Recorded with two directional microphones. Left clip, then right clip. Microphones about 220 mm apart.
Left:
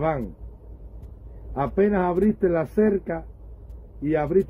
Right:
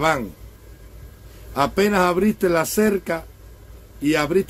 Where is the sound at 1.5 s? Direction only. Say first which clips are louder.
Right 4 dB; 15° right (ahead or behind).